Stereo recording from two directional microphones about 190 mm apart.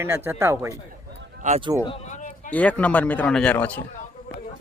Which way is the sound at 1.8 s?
30° left (ahead or behind).